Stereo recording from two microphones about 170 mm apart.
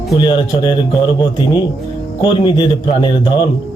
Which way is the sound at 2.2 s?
25° left (ahead or behind).